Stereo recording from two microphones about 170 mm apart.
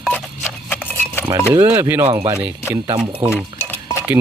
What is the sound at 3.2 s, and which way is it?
Speech, 5° right (ahead or behind).